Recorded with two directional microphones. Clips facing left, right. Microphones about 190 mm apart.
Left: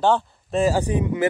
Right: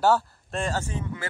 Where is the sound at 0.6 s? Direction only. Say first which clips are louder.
Left 9 dB; 10° left (ahead or behind).